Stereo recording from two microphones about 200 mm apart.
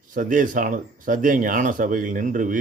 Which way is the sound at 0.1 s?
40° right (ahead or behind).